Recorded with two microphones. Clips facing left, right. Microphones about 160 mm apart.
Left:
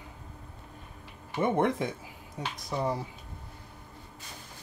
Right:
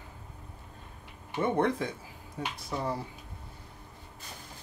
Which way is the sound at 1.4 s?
20° left (ahead or behind).